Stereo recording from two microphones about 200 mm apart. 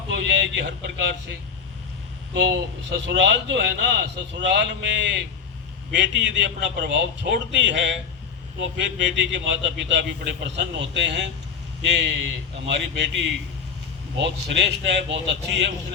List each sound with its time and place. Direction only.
0.1 s a man's voice: 65° right (ahead or behind)
14.9 s a man's voice: 60° right (ahead or behind)